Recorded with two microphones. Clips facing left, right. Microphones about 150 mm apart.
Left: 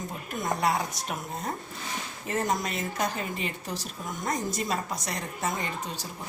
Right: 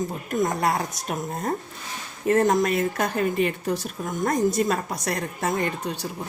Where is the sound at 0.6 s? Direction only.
50° right (ahead or behind).